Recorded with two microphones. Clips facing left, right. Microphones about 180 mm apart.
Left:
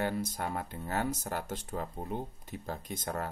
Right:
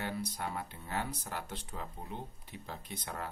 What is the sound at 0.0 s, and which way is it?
Speech, 45° left (ahead or behind).